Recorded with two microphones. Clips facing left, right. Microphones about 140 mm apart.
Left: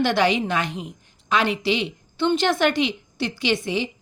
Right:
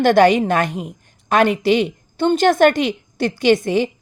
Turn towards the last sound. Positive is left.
turn(degrees=-50)  # may be behind; listen again after turning